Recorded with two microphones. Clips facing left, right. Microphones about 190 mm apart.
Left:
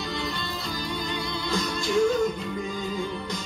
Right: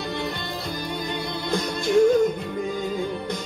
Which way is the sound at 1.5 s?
55° right (ahead or behind).